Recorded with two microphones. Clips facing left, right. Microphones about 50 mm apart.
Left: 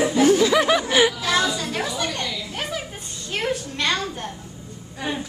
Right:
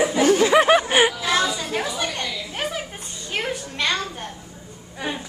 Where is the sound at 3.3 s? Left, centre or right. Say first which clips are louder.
Left 2 dB; centre.